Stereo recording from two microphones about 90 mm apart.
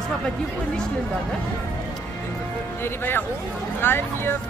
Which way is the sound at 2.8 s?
25° left (ahead or behind).